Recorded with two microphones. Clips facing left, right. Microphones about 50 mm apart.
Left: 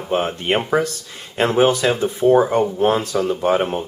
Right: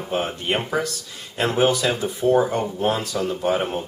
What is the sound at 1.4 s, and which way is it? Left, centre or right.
Speech, left.